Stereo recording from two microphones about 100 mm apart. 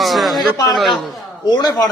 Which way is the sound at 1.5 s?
45° left (ahead or behind).